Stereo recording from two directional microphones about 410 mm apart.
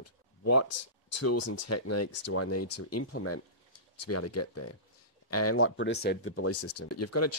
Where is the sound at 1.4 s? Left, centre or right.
Left.